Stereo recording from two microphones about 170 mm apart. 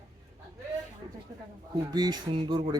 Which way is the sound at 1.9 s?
25° right (ahead or behind).